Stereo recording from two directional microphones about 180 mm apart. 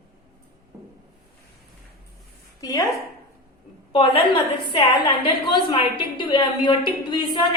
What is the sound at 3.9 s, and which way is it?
Speech, 30° left (ahead or behind).